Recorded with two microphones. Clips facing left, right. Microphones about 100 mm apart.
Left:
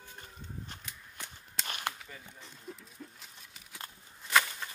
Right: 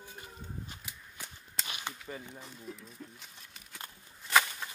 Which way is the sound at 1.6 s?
50° left (ahead or behind).